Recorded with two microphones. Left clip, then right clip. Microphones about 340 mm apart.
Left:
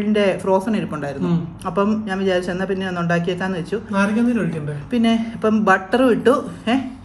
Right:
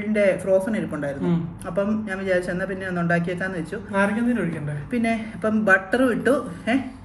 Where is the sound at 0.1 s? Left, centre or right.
Left.